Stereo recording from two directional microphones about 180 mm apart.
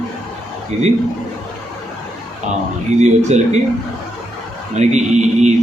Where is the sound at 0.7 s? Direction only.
40° right (ahead or behind).